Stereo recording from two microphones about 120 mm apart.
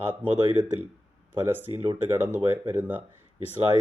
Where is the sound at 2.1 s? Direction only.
20° right (ahead or behind).